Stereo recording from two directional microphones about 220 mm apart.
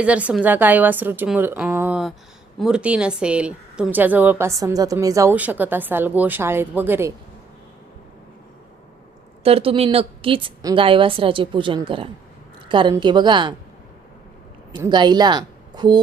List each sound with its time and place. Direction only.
0.0 s speech: 5° right (ahead or behind)
9.4 s a woman's voice: 25° right (ahead or behind)
14.8 s a woman's voice: 20° right (ahead or behind)